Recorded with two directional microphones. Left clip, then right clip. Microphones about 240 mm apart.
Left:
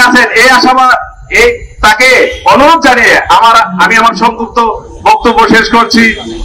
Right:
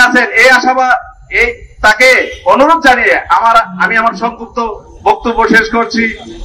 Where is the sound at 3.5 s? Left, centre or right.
Left.